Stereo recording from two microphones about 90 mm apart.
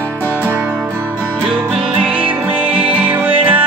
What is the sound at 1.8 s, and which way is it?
Music, 15° right (ahead or behind).